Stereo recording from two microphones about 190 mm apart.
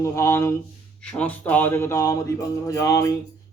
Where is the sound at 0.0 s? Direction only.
15° left (ahead or behind).